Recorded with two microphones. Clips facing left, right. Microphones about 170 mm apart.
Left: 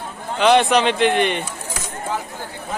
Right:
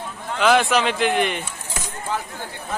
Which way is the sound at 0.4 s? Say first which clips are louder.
Left 3 dB; centre (ahead or behind).